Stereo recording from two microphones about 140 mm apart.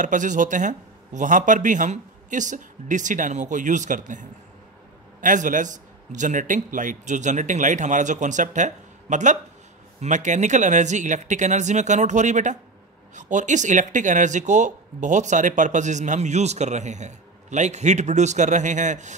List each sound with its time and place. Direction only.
0.0 s speech: 65° right (ahead or behind)